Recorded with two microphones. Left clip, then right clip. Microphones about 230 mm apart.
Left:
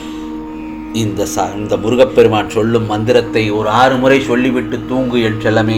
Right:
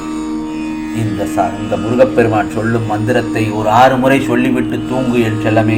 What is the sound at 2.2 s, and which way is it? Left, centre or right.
Speech, left.